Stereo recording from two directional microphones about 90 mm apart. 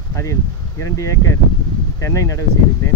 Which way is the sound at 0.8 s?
35° left (ahead or behind).